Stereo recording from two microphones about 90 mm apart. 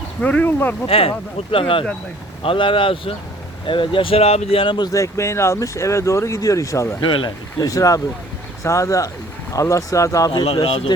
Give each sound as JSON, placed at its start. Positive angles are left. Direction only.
{"t": 0.2, "sound": "speech", "side_deg": 15}
{"t": 0.9, "sound": "speech", "side_deg": 90}
{"t": 1.5, "sound": "speech", "side_deg": 75}
{"t": 3.7, "sound": "speech", "side_deg": 70}
{"t": 4.9, "sound": "speech", "side_deg": 35}
{"t": 7.0, "sound": "speech", "side_deg": 65}
{"t": 7.6, "sound": "speech", "side_deg": 40}
{"t": 10.3, "sound": "speech", "side_deg": 85}